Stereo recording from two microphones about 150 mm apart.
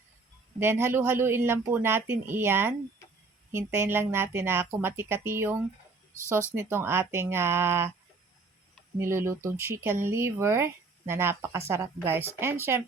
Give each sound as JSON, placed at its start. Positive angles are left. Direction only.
{"t": 0.6, "sound": "speech", "side_deg": -15}
{"t": 9.0, "sound": "speech", "side_deg": -15}